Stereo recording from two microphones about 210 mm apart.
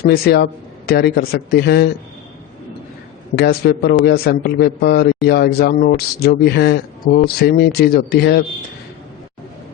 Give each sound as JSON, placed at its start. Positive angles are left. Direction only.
{"t": 0.1, "sound": "a man's voice", "side_deg": 45}
{"t": 3.3, "sound": "a man's voice", "side_deg": 50}